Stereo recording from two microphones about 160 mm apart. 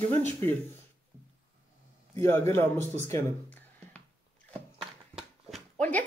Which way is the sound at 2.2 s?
15° left (ahead or behind).